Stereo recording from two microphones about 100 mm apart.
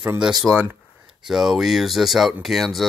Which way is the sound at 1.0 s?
5° right (ahead or behind).